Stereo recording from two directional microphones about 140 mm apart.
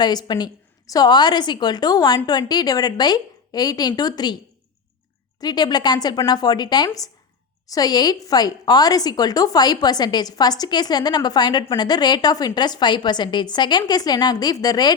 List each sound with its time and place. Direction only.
0.0 s a woman's voice: 30° left (ahead or behind)
5.4 s a woman's voice: 30° left (ahead or behind)